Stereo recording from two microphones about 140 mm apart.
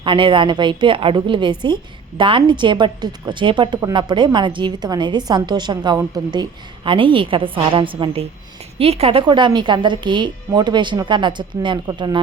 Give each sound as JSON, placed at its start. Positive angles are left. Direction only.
{"t": 0.0, "sound": "a woman's voice", "side_deg": -35}